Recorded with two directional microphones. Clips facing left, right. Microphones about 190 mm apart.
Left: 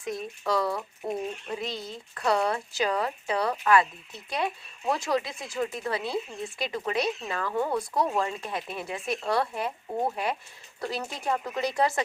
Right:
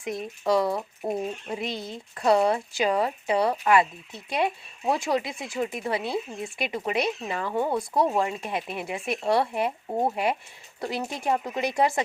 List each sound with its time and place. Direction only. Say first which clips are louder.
0.0 s speech: right 3 dB; 20° right (ahead or behind)
5.0 s speech: right 2 dB; 25° right (ahead or behind)